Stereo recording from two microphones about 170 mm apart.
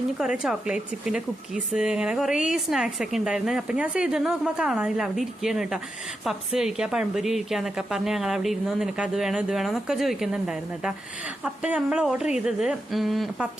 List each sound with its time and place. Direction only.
0.2 s speech: 5° right (ahead or behind)